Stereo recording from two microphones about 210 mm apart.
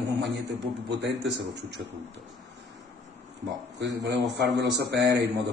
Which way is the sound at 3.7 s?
55° right (ahead or behind).